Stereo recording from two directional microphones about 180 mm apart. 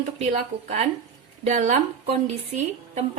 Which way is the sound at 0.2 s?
35° right (ahead or behind).